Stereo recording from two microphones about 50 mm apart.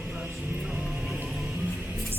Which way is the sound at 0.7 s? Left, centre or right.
Centre.